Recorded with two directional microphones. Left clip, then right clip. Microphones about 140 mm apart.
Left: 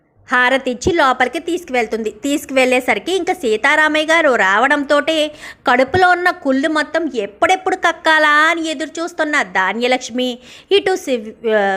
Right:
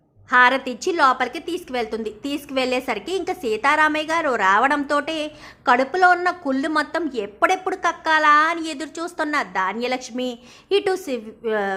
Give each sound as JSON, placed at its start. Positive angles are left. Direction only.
{"t": 0.3, "sound": "speech", "side_deg": 25}
{"t": 6.2, "sound": "speech", "side_deg": 15}